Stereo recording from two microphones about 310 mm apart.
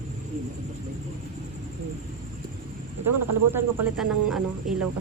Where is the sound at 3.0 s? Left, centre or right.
Right.